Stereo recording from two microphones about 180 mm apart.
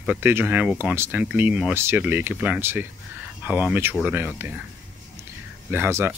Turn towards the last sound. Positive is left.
turn(degrees=-15)  # may be behind; listen again after turning